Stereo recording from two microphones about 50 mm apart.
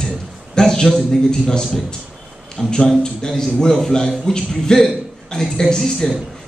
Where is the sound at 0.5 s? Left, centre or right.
Centre.